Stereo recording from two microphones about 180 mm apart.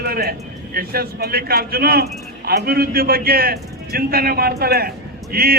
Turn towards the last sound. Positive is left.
turn(degrees=-60)  # may be behind; listen again after turning